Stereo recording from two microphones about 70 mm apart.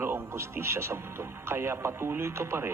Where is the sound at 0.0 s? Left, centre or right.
Right.